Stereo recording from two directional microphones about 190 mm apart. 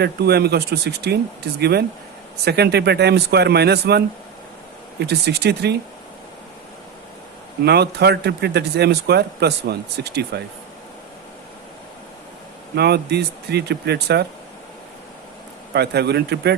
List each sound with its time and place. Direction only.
0.0 s speech: 60° right (ahead or behind)
7.6 s speech: 60° right (ahead or behind)
12.7 s speech: 60° right (ahead or behind)
15.7 s speech: 60° right (ahead or behind)